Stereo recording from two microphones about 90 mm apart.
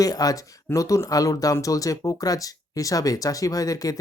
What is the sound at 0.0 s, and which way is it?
Speech, 45° left (ahead or behind).